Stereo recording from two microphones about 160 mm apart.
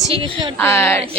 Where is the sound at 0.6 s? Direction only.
15° left (ahead or behind).